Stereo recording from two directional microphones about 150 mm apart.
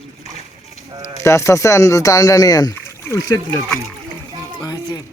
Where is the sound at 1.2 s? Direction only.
20° left (ahead or behind).